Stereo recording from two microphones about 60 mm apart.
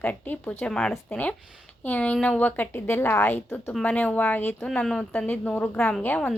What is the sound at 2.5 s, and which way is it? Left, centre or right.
A woman's voice, left.